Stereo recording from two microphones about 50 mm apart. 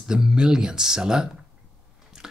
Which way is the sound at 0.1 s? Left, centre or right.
Centre.